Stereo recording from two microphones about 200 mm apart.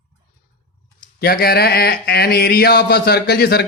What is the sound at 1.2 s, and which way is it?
Speech, 50° left (ahead or behind).